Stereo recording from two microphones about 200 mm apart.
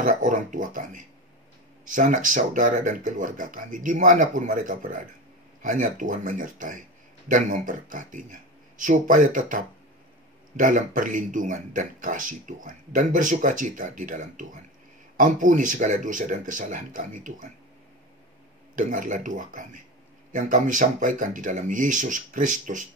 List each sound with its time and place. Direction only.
0.0 s speech: 40° right (ahead or behind)
18.8 s speech: 40° right (ahead or behind)